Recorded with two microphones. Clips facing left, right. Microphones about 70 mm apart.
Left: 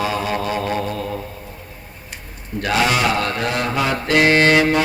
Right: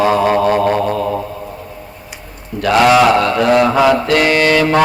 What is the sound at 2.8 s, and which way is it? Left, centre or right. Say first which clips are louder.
Speech: right 10 dB; right.